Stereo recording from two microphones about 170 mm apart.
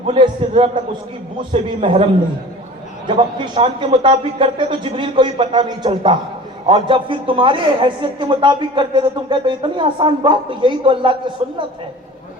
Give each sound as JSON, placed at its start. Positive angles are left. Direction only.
{"t": 0.0, "sound": "a man's voice", "side_deg": -30}
{"t": 3.1, "sound": "a man's voice", "side_deg": -30}